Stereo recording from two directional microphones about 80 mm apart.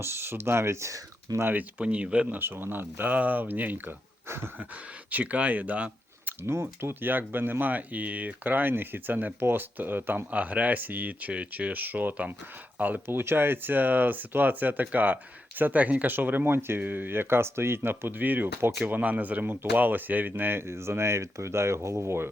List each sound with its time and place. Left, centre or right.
0.0 s speech: right
1.4 s speech: right
1.8 s speech: centre
2.4 s speech: right
4.7 s speech: centre
6.4 s speech: right